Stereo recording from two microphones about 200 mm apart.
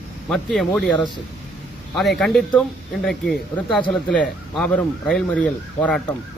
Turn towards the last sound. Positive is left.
turn(degrees=5)  # may be behind; listen again after turning